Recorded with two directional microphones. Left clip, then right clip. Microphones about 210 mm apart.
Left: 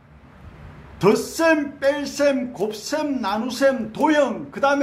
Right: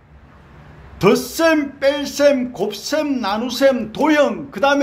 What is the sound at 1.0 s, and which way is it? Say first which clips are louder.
Speech: right 3 dB; 25° right (ahead or behind).